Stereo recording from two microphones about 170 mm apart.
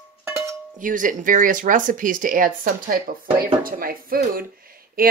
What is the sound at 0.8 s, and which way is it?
Speech, 50° right (ahead or behind).